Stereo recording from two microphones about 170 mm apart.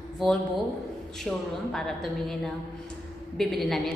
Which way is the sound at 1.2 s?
5° left (ahead or behind).